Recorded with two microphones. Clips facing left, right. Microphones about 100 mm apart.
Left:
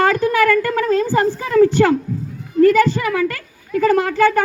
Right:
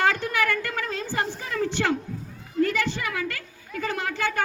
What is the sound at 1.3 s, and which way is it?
Speech, 75° left (ahead or behind).